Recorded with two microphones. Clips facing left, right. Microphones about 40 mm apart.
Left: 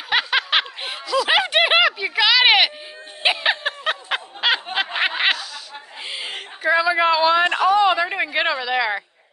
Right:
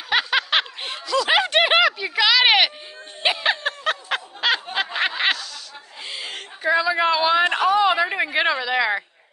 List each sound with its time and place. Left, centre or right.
0.1 s snicker: centre
6.0 s a sound: centre
6.6 s speech: centre